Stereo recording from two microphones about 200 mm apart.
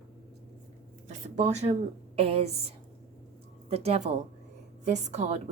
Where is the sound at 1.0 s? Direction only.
35° right (ahead or behind).